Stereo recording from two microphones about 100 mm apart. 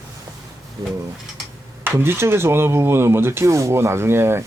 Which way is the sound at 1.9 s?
25° right (ahead or behind).